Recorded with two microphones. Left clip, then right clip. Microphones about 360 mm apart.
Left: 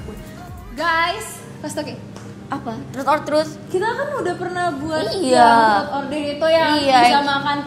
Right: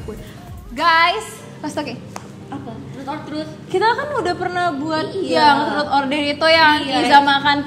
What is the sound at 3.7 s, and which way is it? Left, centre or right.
A woman's voice, right.